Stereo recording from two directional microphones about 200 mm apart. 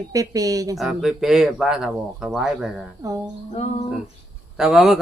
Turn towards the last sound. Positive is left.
turn(degrees=0)  # may be behind; listen again after turning